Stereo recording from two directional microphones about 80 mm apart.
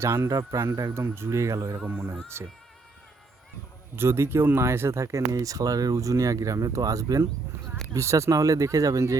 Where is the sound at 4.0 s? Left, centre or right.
Right.